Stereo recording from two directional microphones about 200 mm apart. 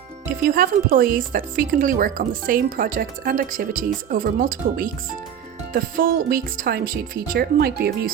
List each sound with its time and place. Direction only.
0.4 s speech: 45° right (ahead or behind)